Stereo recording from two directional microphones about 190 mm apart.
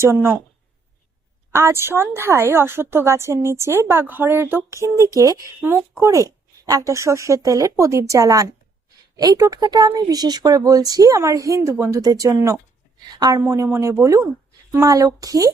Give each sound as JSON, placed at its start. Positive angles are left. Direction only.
{"t": 0.0, "sound": "a woman's voice", "side_deg": -15}
{"t": 1.5, "sound": "a woman's voice", "side_deg": -15}